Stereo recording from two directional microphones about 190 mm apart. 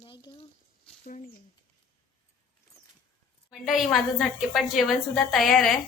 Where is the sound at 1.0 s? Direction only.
45° left (ahead or behind).